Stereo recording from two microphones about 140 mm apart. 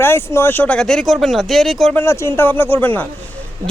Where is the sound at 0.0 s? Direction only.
15° left (ahead or behind); by 2.0 s centre (ahead or behind).